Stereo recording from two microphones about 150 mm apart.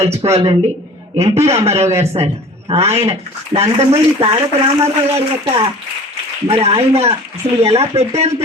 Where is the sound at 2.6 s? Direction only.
45° right (ahead or behind).